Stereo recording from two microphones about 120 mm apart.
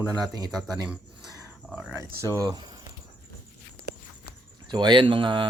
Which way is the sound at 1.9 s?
25° right (ahead or behind).